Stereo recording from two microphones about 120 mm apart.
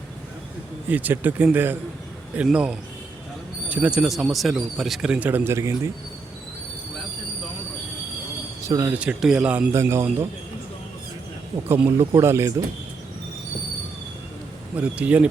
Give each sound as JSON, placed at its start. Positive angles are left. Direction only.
{"t": 0.9, "sound": "speech", "side_deg": -15}
{"t": 8.6, "sound": "speech", "side_deg": -30}
{"t": 8.9, "sound": "speech", "side_deg": -10}
{"t": 9.7, "sound": "speech", "side_deg": -20}
{"t": 12.2, "sound": "speech", "side_deg": -20}
{"t": 14.8, "sound": "speech", "side_deg": -10}